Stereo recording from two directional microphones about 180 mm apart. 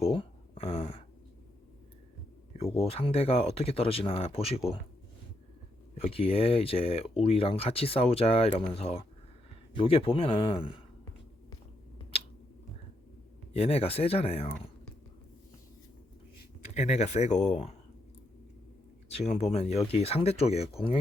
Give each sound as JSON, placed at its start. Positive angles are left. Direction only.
{"t": 0.0, "sound": "a sound", "side_deg": 30}
{"t": 2.5, "sound": "speech", "side_deg": 35}
{"t": 6.0, "sound": "speech", "side_deg": 35}
{"t": 13.5, "sound": "speech", "side_deg": 35}
{"t": 16.7, "sound": "speech", "side_deg": 40}
{"t": 19.0, "sound": "speech", "side_deg": 35}